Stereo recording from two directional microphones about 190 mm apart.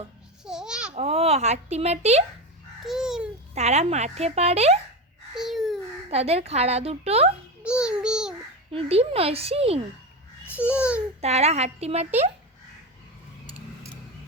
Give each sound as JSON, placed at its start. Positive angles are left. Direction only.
{"t": 0.4, "sound": "babbling", "side_deg": -5}
{"t": 0.9, "sound": "speech", "side_deg": -30}
{"t": 2.8, "sound": "babbling", "side_deg": 0}
{"t": 3.5, "sound": "speech", "side_deg": -35}
{"t": 5.3, "sound": "babbling", "side_deg": 0}
{"t": 6.1, "sound": "speech", "side_deg": -35}
{"t": 7.6, "sound": "a sound", "side_deg": -5}
{"t": 8.7, "sound": "speech", "side_deg": -30}
{"t": 10.5, "sound": "babbling", "side_deg": -5}
{"t": 11.2, "sound": "speech", "side_deg": -35}